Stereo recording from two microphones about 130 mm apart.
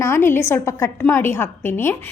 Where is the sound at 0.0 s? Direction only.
20° left (ahead or behind).